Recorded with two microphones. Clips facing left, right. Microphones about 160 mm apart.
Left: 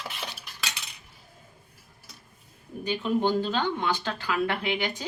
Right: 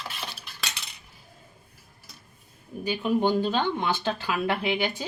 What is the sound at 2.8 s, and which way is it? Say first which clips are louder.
Speech: right 1 dB; 10° right (ahead or behind).